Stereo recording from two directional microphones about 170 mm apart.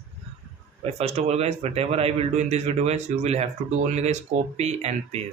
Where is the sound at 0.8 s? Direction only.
40° right (ahead or behind).